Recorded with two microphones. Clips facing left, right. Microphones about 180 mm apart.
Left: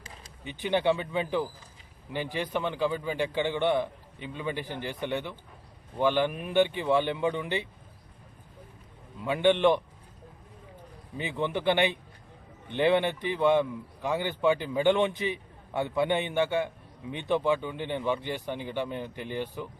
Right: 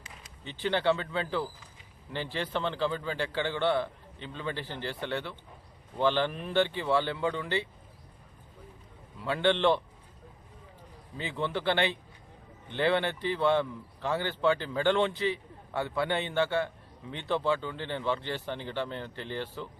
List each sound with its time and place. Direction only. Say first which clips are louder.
0.4 s a man's voice: left 2 dB; 15° left (ahead or behind)
9.2 s a man's voice: left 3 dB; 15° left (ahead or behind)
11.2 s a man's voice: left 2 dB; 15° left (ahead or behind)